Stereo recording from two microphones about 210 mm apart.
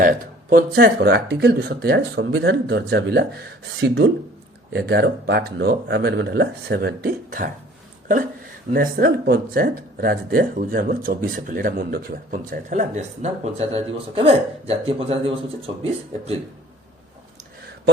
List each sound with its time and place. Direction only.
0.0 s speech: 40° right (ahead or behind)
8.7 s speech: 45° right (ahead or behind); by 16.3 s 30° right (ahead or behind)